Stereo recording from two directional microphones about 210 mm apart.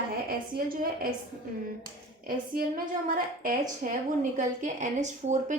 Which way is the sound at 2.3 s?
45° right (ahead or behind).